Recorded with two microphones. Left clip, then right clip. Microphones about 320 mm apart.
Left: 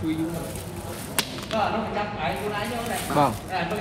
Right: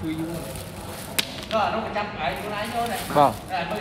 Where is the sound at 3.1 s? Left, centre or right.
Centre.